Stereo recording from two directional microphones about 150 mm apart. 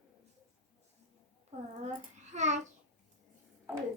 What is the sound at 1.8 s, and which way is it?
Speech, 50° right (ahead or behind).